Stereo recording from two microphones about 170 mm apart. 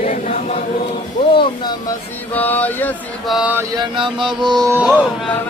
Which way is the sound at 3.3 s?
Centre (ahead or behind).